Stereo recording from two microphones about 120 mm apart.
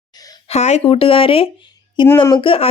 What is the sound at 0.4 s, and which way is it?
A woman's voice, 65° left (ahead or behind).